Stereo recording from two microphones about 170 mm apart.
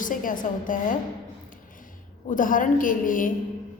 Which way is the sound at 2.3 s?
50° left (ahead or behind).